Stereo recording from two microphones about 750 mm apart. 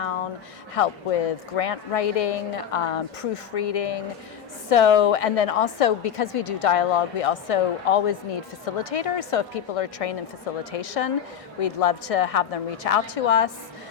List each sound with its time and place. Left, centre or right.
0.8 s a woman's voice: left